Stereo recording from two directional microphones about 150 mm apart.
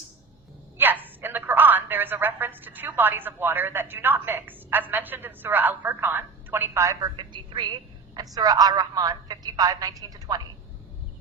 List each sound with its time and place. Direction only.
0.8 s a woman's voice: 15° right (ahead or behind)